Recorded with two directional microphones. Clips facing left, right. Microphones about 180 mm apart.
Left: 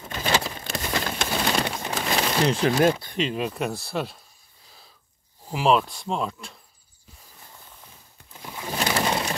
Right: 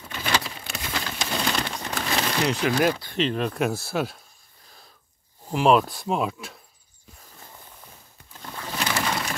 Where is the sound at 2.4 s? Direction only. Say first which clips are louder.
Left 2 dB; 30° left (ahead or behind).